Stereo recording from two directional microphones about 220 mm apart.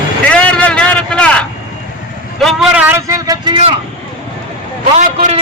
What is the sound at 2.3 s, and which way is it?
Vehicle, centre (ahead or behind).